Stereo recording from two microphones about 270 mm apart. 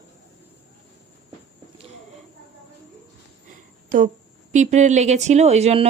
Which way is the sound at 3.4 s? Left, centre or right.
Right.